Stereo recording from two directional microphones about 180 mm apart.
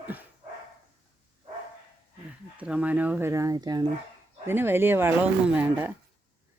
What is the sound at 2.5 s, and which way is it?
Speech, 5° right (ahead or behind).